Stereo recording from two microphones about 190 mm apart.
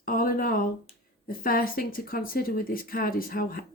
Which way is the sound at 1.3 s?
50° left (ahead or behind).